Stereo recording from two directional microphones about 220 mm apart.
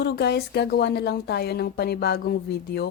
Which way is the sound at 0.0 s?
45° left (ahead or behind).